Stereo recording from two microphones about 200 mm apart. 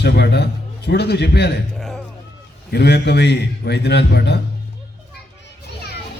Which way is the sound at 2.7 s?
55° left (ahead or behind).